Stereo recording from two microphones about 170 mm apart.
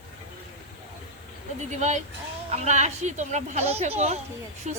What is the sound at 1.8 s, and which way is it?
A woman's voice, 45° right (ahead or behind).